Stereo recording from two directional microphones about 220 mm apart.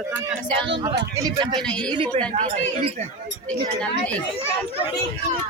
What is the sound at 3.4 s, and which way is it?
Speech, 5° left (ahead or behind).